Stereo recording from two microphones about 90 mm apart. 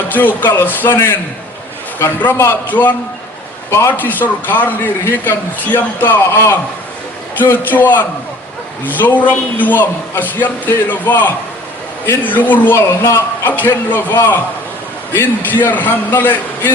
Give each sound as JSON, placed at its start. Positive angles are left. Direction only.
{"t": 0.1, "sound": "a man's voice", "side_deg": 20}
{"t": 12.9, "sound": "a man's voice", "side_deg": 30}